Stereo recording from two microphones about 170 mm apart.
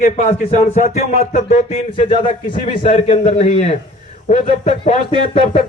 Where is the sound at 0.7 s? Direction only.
45° left (ahead or behind).